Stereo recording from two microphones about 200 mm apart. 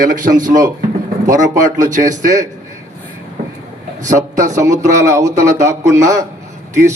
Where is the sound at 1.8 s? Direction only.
40° right (ahead or behind).